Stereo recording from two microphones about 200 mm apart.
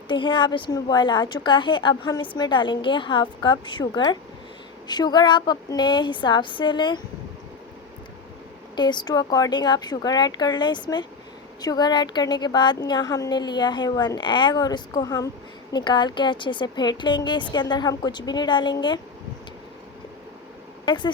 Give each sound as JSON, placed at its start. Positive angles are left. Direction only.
{"t": 0.1, "sound": "a woman's voice", "side_deg": 25}
{"t": 8.7, "sound": "a woman's voice", "side_deg": 20}
{"t": 20.8, "sound": "speech", "side_deg": 20}